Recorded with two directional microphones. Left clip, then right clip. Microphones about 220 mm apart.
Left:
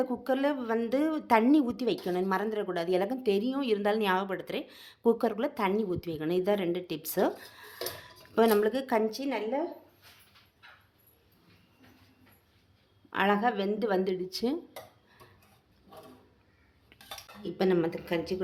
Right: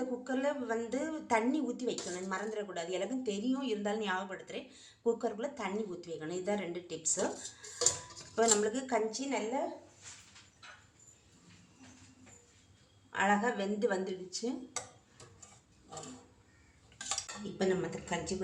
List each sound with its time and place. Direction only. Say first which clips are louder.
0.0 s a woman's voice: left 6 dB; 50° left (ahead or behind)
8.4 s a woman's voice: left 5 dB; 45° left (ahead or behind)
13.1 s a woman's voice: left 4 dB; 55° left (ahead or behind)
16.9 s cutlery: right 7 dB; 50° left (ahead or behind)
17.6 s a woman's voice: left 6 dB; 45° left (ahead or behind)